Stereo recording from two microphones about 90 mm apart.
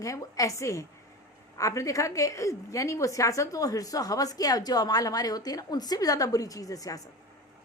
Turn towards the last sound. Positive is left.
turn(degrees=40)  # may be behind; listen again after turning